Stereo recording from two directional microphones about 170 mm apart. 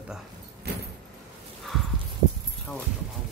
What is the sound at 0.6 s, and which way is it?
Vehicle, 70° right (ahead or behind).